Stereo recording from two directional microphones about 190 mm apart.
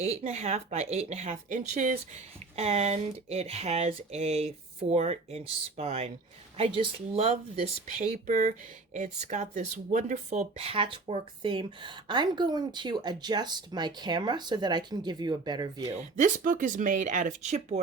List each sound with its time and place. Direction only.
0.0 s speech: 35° right (ahead or behind)
16.0 s speech: 40° right (ahead or behind)